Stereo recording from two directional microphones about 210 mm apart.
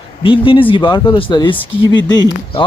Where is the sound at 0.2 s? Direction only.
25° left (ahead or behind).